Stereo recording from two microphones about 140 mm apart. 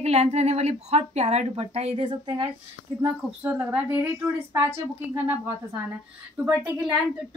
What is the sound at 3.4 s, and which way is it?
Speech, 15° right (ahead or behind).